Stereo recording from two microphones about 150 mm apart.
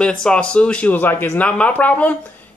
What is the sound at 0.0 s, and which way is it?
Speech, 5° left (ahead or behind).